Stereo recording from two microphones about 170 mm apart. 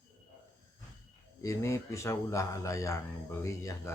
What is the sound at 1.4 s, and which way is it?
Speech, 15° left (ahead or behind).